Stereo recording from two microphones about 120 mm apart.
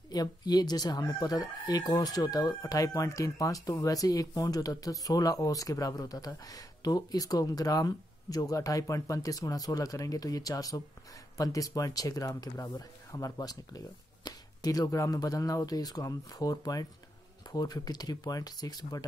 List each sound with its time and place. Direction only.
0.1 s speech: 35° left (ahead or behind)